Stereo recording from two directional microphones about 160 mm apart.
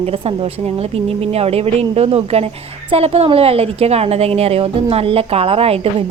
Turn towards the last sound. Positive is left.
turn(degrees=-40)  # may be behind; listen again after turning